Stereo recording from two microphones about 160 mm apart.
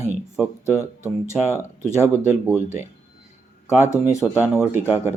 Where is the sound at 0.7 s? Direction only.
15° left (ahead or behind).